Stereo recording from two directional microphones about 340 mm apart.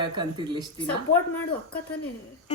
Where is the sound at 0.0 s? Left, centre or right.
Centre.